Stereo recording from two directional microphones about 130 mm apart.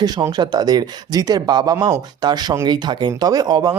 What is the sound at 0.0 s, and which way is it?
Speech, 30° right (ahead or behind).